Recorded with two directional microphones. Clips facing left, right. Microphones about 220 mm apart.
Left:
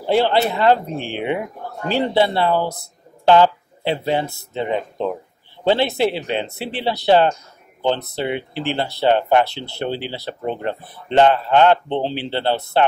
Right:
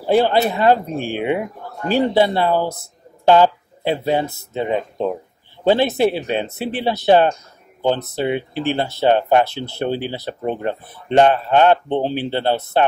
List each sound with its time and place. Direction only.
0.4 s speech: 15° right (ahead or behind)